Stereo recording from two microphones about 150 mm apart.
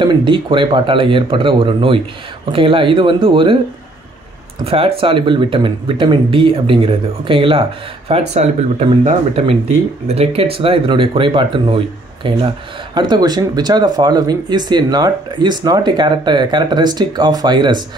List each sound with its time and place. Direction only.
0.0 s speech: 30° right (ahead or behind)
4.6 s speech: 40° right (ahead or behind)